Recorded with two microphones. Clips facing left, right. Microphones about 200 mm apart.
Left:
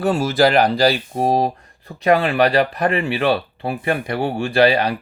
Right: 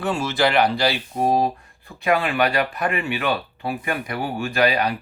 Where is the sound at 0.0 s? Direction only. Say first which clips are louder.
Left 5 dB; 35° left (ahead or behind).